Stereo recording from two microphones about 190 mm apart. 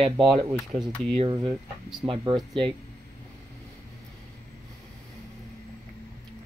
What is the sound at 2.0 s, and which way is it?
Speech, 25° right (ahead or behind).